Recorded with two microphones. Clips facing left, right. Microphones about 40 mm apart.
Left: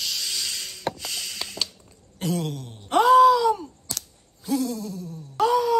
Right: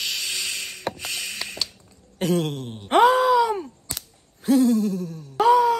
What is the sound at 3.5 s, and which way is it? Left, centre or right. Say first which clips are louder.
Cap gun: right 4 dB; right.